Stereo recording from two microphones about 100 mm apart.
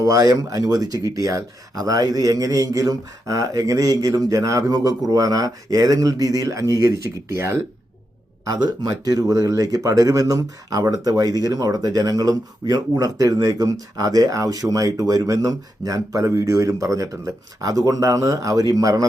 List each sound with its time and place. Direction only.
0.0 s speech: 35° right (ahead or behind)
8.4 s speech: 40° right (ahead or behind)